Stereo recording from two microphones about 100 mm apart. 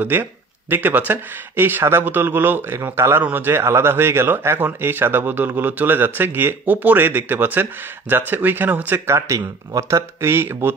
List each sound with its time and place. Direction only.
0.0 s speech: 20° right (ahead or behind)